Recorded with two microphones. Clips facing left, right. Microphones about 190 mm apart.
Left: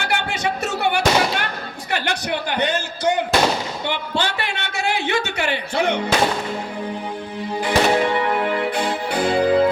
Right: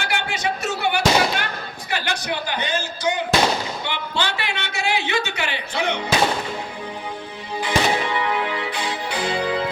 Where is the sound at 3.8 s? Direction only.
45° left (ahead or behind).